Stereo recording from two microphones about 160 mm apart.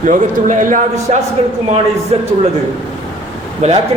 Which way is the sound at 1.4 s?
40° right (ahead or behind).